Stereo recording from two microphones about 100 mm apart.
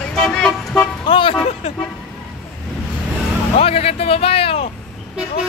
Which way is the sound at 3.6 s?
75° left (ahead or behind).